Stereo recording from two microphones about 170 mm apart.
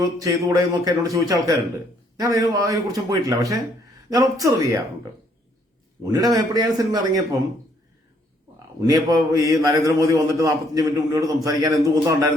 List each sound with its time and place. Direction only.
0.0 s a man's voice: 20° right (ahead or behind)
6.1 s a man's voice: 20° right (ahead or behind)
8.5 s a man's voice: 20° right (ahead or behind)